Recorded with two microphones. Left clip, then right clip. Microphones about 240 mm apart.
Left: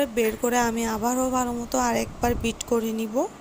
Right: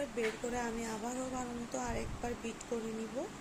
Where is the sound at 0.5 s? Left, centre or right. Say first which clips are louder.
Left 15 dB; left.